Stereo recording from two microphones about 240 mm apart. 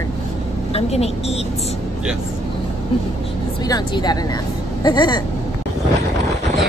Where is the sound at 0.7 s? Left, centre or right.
Left.